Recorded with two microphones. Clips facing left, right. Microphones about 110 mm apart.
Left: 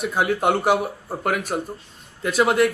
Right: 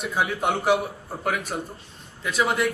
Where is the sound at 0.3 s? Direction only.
55° left (ahead or behind).